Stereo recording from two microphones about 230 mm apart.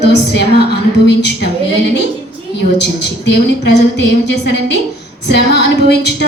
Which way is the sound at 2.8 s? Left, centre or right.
Left.